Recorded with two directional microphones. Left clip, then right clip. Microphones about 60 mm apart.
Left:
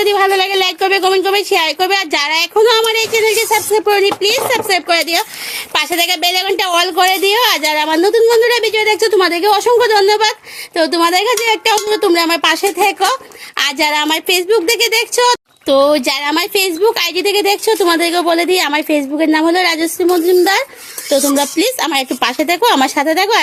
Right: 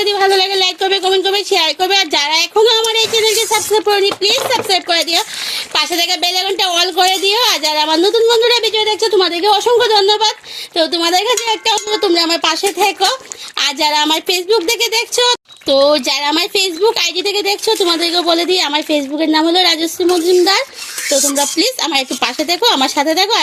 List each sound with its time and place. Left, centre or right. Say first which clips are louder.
0.0 s a sound: left 2 dB; centre
0.3 s speech: even; centre
1.3 s speech: left 1 dB; centre
11.9 s speech: left 1 dB; left
12.6 s speech: left 1 dB; left
20.4 s speech: even; left
21.8 s speech: even; left
22.1 s speech: left 2 dB; left